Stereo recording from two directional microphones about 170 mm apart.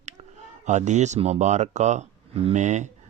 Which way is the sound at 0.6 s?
45° right (ahead or behind).